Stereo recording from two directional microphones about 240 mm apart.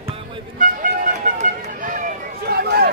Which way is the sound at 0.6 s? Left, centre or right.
Right.